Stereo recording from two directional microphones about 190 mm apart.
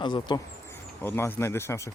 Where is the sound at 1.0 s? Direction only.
10° left (ahead or behind).